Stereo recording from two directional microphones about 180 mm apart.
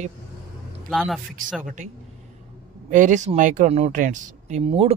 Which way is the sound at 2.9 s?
45° right (ahead or behind).